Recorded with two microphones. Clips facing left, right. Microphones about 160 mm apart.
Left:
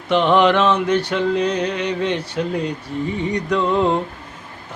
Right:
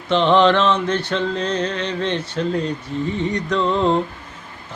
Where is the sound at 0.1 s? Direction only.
10° left (ahead or behind).